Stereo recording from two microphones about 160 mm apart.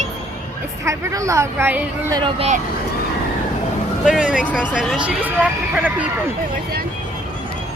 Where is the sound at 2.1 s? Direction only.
30° right (ahead or behind).